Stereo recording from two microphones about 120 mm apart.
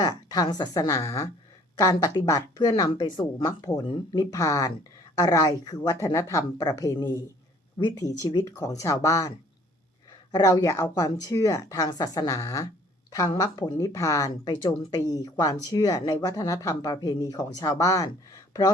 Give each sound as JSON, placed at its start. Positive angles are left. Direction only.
{"t": 0.0, "sound": "speech", "side_deg": 35}
{"t": 10.3, "sound": "speech", "side_deg": 30}